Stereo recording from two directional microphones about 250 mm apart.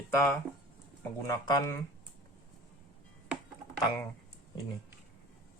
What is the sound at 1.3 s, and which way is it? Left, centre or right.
Speech, centre.